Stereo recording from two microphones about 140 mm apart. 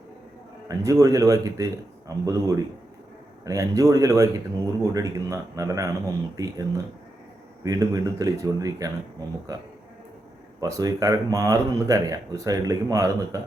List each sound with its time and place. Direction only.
0.7 s a man's voice: 25° right (ahead or behind)